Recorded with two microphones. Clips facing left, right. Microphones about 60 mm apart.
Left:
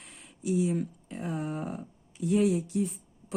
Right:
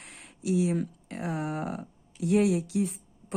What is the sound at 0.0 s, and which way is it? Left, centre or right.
Speech, right.